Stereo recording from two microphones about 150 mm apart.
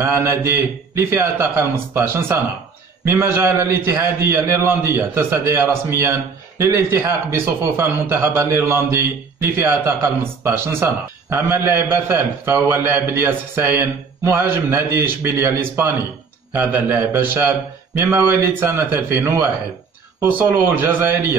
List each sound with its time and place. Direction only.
0.0 s a man's voice: 15° right (ahead or behind)